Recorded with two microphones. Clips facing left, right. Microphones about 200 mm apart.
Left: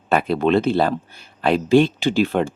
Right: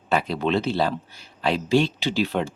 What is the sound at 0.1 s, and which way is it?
Speech, 55° left (ahead or behind).